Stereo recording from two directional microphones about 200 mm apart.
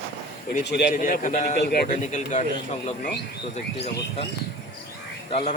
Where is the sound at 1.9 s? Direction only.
35° left (ahead or behind).